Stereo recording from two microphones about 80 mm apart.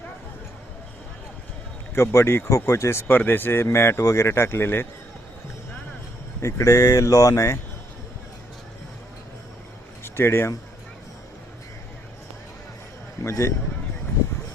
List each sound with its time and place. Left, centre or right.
2.0 s speech: left
3.1 s speech: left
6.4 s speech: left
10.0 s speech: left
13.2 s speech: left